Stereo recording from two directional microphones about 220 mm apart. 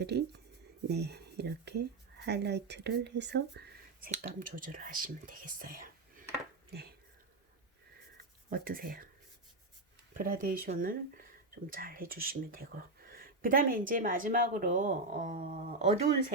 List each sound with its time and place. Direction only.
0.0 s speech: 50° right (ahead or behind)
4.0 s speech: 35° right (ahead or behind)
8.4 s speech: 40° right (ahead or behind)
10.2 s speech: 40° right (ahead or behind)